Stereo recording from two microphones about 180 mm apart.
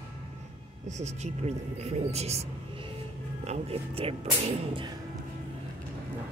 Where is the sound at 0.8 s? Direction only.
40° right (ahead or behind).